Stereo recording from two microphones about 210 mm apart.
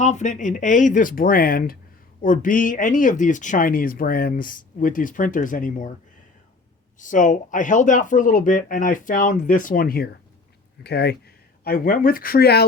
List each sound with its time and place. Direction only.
0.0 s speech: 35° left (ahead or behind)
7.0 s speech: 35° left (ahead or behind)